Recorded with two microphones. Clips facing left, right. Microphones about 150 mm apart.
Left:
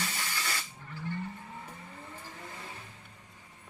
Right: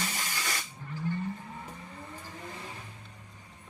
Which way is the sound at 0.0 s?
15° right (ahead or behind).